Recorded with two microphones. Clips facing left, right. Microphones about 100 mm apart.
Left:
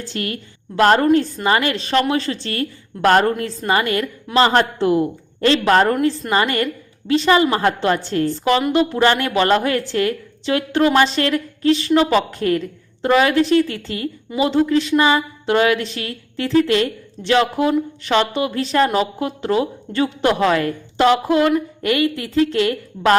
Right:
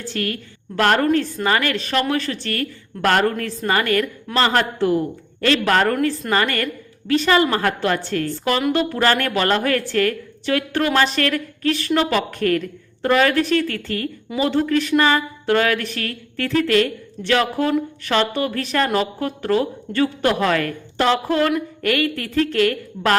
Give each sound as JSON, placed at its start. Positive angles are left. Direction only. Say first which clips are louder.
{"t": 0.1, "sound": "a woman's voice", "louder": "right 1 dB", "side_deg": 25}